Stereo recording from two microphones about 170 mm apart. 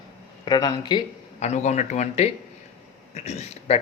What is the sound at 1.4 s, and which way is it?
Speech, 40° left (ahead or behind).